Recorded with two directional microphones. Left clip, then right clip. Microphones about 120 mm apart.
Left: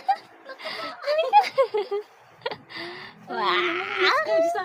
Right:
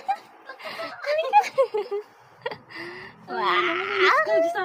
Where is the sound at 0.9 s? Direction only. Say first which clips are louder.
Left 1 dB; 25° left (ahead or behind).